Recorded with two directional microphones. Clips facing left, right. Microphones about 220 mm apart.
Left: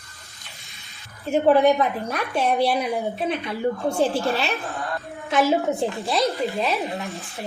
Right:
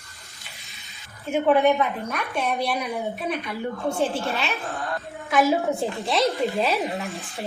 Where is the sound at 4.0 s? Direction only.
35° left (ahead or behind).